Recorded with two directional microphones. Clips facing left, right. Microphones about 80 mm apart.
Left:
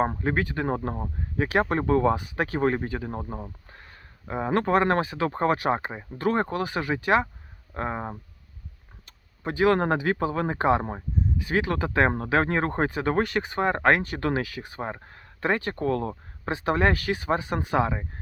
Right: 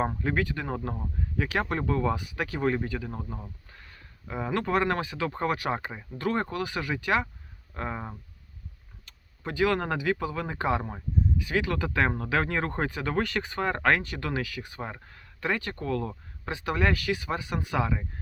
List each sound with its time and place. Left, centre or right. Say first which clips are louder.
0.0 s speech: left 3 dB; left
9.4 s speech: left 4 dB; left